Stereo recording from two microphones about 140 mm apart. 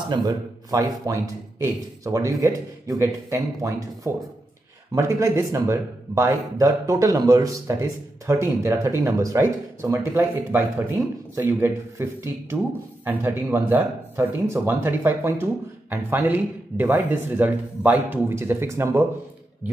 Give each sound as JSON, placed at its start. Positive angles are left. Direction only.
{"t": 0.1, "sound": "speech", "side_deg": -25}